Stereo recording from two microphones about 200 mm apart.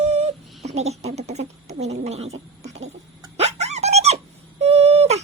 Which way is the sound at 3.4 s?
35° right (ahead or behind).